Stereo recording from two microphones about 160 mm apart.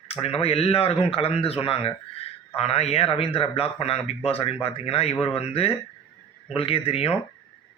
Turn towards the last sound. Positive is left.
turn(degrees=40)  # may be behind; listen again after turning